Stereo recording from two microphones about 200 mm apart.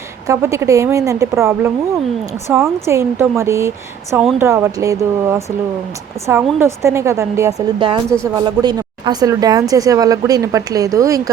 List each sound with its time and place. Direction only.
0.3 s speech: 15° right (ahead or behind)